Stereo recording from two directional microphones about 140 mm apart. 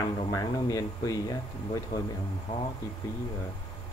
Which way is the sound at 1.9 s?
90° left.